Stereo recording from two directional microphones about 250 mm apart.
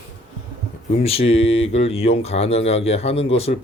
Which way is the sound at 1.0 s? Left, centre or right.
Left.